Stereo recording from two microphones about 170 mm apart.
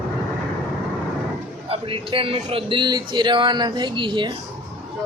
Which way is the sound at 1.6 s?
35° right (ahead or behind).